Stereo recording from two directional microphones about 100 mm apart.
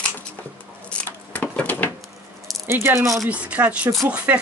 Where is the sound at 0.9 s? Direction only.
15° left (ahead or behind).